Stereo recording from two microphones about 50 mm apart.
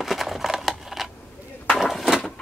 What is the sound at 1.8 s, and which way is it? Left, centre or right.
Door, centre.